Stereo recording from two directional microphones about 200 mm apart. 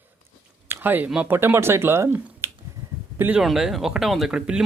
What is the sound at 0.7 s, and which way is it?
Speech, 10° right (ahead or behind).